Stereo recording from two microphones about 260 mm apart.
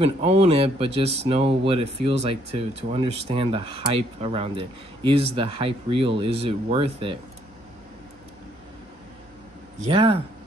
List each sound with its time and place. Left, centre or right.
0.0 s speech: right
9.8 s speech: right